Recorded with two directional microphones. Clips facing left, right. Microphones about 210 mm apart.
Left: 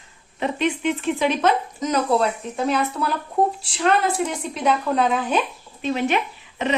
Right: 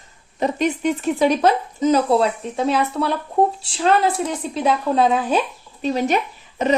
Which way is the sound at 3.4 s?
25° right (ahead or behind).